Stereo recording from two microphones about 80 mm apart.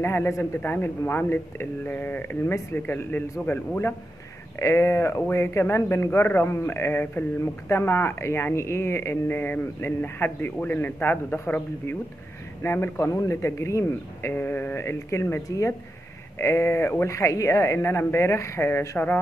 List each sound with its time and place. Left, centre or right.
0.0 s speech: left
4.6 s speech: left
14.3 s speech: left
15.4 s speech: left
16.3 s speech: left